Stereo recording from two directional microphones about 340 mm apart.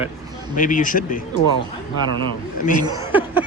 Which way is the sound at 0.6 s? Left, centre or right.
Left.